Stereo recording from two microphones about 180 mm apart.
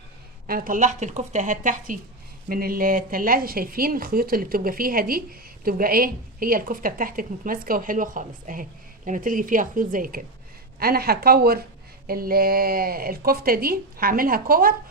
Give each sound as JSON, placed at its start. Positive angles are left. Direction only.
{"t": 0.4, "sound": "speech", "side_deg": -50}